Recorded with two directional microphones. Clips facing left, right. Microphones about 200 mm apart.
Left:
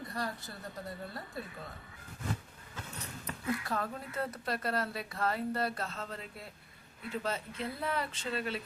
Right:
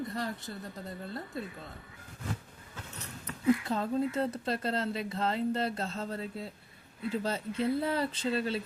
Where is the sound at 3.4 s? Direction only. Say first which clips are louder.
Right 7 dB; 25° right (ahead or behind).